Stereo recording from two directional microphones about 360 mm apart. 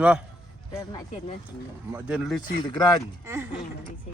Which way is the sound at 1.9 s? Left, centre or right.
Centre.